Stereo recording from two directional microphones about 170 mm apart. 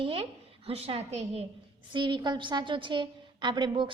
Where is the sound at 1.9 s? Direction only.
25° right (ahead or behind).